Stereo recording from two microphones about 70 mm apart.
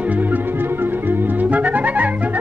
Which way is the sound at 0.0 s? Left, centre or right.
Right.